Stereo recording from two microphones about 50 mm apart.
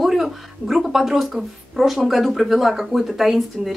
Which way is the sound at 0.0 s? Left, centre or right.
Centre.